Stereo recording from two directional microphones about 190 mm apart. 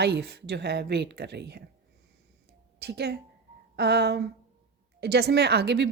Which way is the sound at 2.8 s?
60° right (ahead or behind).